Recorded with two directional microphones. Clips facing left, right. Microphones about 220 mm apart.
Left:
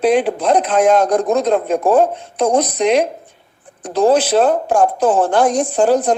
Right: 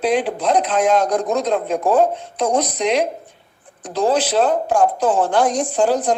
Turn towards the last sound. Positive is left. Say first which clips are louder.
# left 3 dB
turn(degrees=50)  # may be behind; listen again after turning